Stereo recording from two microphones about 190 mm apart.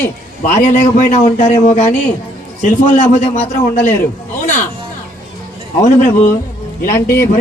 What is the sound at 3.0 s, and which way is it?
Speech, 35° left (ahead or behind).